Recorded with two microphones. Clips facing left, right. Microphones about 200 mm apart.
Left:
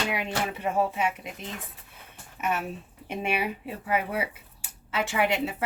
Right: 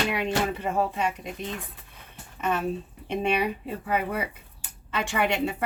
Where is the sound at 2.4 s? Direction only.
10° left (ahead or behind).